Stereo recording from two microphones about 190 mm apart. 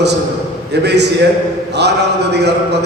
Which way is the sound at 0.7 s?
60° right (ahead or behind).